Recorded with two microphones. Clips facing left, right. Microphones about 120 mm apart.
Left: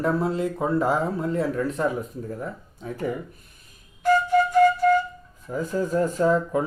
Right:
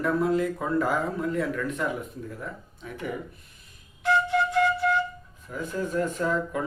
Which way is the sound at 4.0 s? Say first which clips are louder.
Left 4 dB; 45° left (ahead or behind).